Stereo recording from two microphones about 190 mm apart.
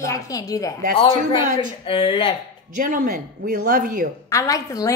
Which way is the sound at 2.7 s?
45° right (ahead or behind).